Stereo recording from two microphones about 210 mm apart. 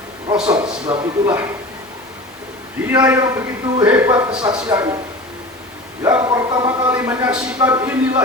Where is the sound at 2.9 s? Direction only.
15° right (ahead or behind).